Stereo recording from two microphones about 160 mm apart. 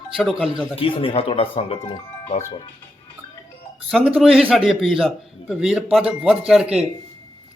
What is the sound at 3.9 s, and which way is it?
A man's voice, centre (ahead or behind).